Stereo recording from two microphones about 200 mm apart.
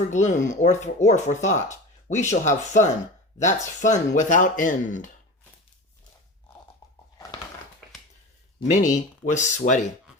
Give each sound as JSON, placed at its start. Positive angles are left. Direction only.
{"t": 0.1, "sound": "speech", "side_deg": 35}
{"t": 8.7, "sound": "speech", "side_deg": 40}